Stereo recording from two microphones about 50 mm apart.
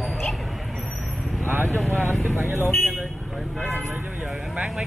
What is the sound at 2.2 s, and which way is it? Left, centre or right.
Speech, right.